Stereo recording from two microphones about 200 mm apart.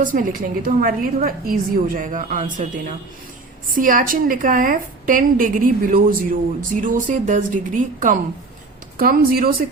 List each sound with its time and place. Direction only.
0.0 s a woman's voice: 40° right (ahead or behind)